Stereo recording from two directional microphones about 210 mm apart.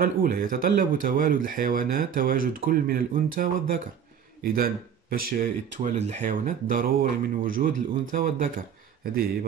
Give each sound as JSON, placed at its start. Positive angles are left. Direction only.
{"t": 0.0, "sound": "speech", "side_deg": -45}